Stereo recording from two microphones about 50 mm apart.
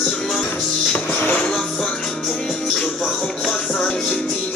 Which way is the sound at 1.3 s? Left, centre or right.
Centre.